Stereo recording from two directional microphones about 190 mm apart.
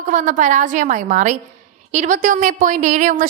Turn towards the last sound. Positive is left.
turn(degrees=-40)  # may be behind; listen again after turning